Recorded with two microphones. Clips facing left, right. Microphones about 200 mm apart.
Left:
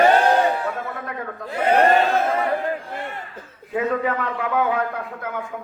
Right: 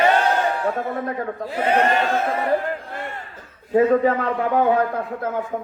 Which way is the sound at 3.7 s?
35° right (ahead or behind).